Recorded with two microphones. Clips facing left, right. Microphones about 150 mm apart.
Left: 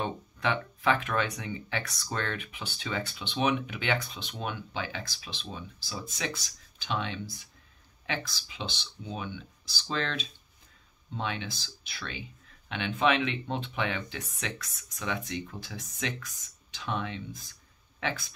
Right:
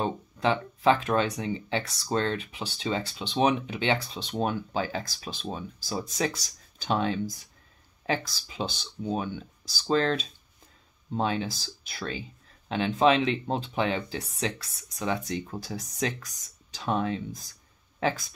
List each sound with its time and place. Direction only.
0.0 s speech: 30° right (ahead or behind)